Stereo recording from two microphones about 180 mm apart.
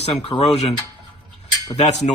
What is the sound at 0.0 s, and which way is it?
Speech, 35° left (ahead or behind).